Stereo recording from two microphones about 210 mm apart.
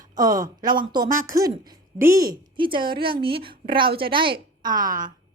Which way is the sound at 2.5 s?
25° right (ahead or behind).